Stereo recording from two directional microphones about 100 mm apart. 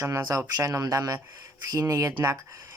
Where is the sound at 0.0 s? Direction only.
30° right (ahead or behind).